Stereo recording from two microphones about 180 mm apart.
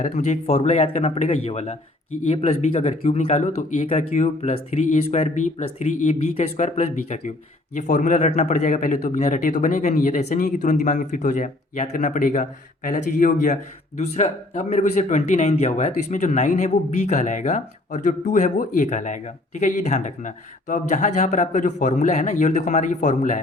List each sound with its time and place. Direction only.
0.0 s speech: 40° left (ahead or behind)